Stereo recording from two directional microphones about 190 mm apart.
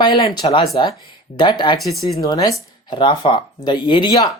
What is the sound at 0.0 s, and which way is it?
Speech, 25° left (ahead or behind).